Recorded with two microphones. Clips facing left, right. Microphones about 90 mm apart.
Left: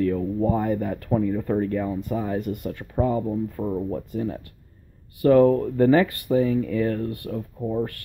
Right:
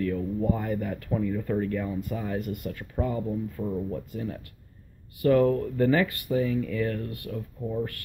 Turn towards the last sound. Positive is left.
turn(degrees=35)  # may be behind; listen again after turning